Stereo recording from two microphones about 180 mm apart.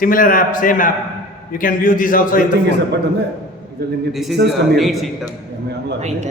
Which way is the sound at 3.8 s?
65° right (ahead or behind).